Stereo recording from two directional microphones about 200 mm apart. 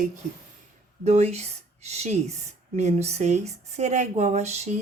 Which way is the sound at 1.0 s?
35° right (ahead or behind).